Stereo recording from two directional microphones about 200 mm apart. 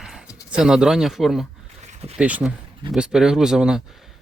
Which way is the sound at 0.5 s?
5° right (ahead or behind).